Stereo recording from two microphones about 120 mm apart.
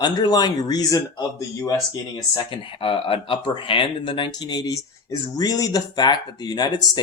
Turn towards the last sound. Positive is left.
turn(degrees=35)  # may be behind; listen again after turning